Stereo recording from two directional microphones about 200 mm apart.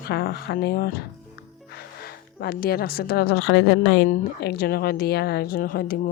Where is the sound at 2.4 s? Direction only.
50° left (ahead or behind).